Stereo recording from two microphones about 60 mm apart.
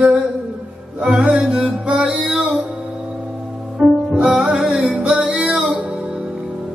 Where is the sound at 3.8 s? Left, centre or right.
Right.